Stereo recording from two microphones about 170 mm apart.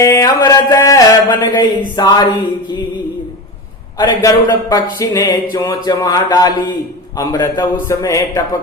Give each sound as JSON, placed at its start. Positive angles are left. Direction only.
{"t": 0.0, "sound": "speech", "side_deg": 20}
{"t": 3.9, "sound": "speech", "side_deg": 20}